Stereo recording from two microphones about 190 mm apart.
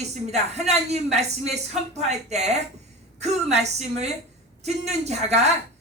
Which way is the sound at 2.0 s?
35° right (ahead or behind).